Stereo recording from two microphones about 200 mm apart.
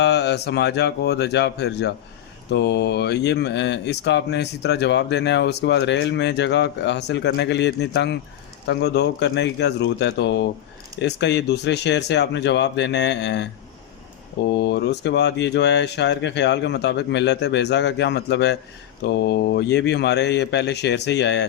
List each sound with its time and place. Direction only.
0.0 s speech: 55° left (ahead or behind)
14.5 s speech: 60° left (ahead or behind)